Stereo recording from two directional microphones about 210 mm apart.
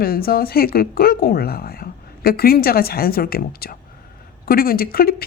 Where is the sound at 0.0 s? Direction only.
45° left (ahead or behind).